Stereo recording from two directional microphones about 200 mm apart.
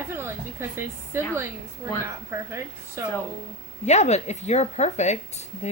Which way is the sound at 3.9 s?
35° left (ahead or behind).